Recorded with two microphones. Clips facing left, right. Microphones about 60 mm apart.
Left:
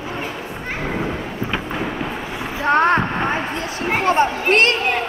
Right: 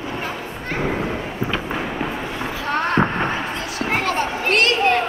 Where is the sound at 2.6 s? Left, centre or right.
Left.